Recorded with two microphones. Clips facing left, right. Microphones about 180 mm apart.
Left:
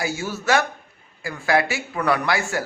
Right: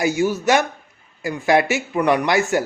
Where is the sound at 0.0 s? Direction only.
15° right (ahead or behind).